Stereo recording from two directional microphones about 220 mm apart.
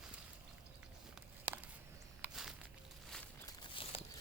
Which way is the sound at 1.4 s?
5° right (ahead or behind).